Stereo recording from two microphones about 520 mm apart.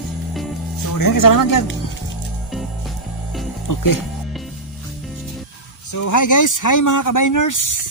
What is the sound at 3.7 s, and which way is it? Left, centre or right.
Speech, left.